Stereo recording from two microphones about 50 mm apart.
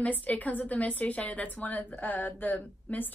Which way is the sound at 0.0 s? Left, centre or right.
Left.